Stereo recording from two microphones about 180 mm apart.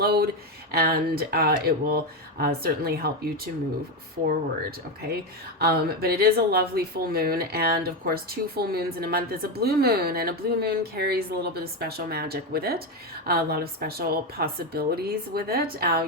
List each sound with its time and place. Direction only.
0.0 s a woman's voice: 60° right (ahead or behind)
5.0 s a woman's voice: 60° right (ahead or behind)